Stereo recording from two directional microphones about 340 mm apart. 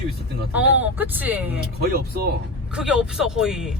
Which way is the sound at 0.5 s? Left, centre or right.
Centre.